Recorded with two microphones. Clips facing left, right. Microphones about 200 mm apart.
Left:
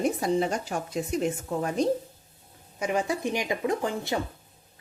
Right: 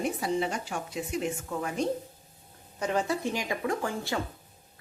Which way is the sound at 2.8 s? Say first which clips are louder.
Left 1 dB; 10° left (ahead or behind).